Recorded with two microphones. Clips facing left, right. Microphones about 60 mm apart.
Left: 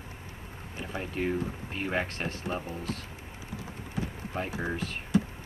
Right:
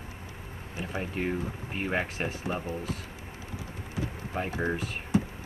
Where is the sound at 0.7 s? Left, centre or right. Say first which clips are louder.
Right 2 dB; centre.